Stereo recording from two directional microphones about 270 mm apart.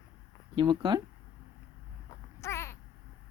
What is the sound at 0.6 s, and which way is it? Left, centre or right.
Speech, centre.